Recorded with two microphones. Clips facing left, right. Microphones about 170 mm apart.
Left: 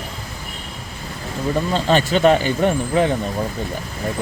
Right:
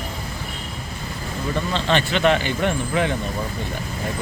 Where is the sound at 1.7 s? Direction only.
40° left (ahead or behind).